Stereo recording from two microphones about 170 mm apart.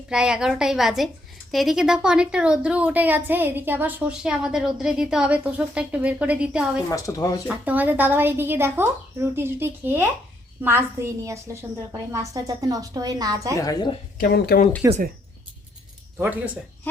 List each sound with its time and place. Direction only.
0.1 s a woman's voice: 5° right (ahead or behind)
6.9 s speech: 20° left (ahead or behind)
7.4 s a woman's voice: 10° right (ahead or behind)
13.6 s speech: 20° left (ahead or behind)
14.2 s speech: 65° left (ahead or behind)
16.1 s speech: 10° right (ahead or behind)